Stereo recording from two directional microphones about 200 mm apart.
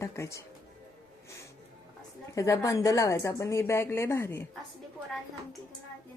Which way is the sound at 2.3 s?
15° left (ahead or behind).